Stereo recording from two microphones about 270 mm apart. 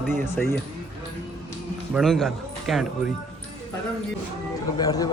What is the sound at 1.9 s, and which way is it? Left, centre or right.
Speech, centre.